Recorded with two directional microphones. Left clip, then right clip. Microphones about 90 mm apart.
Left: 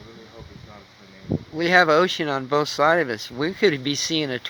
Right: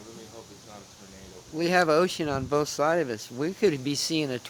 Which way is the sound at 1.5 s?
25° left (ahead or behind).